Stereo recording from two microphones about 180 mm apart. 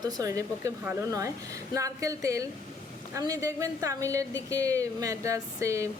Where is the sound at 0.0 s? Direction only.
20° right (ahead or behind).